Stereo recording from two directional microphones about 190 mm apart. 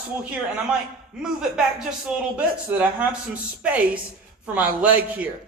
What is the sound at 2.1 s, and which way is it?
A man's voice, 5° right (ahead or behind).